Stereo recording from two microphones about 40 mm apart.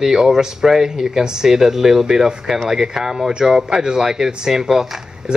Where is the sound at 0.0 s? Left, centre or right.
Centre.